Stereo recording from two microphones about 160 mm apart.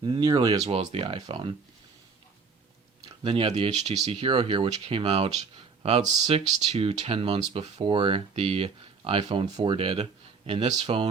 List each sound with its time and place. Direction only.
0.0 s speech: 25° right (ahead or behind)
0.6 s speech: 45° right (ahead or behind)
3.2 s speech: 40° right (ahead or behind)